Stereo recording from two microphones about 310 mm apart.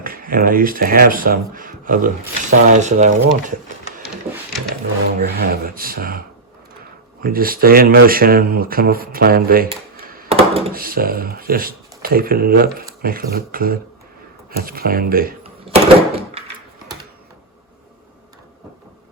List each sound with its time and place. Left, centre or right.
0.0 s speech: right
5.2 s speech: right
15.6 s door: centre